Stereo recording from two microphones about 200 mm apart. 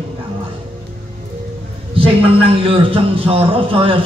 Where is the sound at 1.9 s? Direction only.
30° right (ahead or behind).